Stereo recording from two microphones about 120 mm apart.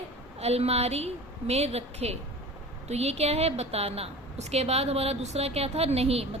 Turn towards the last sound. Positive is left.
turn(degrees=-60)  # may be behind; listen again after turning